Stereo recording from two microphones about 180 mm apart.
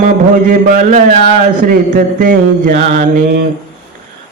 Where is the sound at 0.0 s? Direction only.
45° right (ahead or behind).